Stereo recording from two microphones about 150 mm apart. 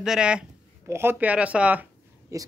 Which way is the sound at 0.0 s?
5° right (ahead or behind).